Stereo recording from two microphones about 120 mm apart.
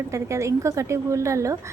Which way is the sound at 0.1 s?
25° right (ahead or behind).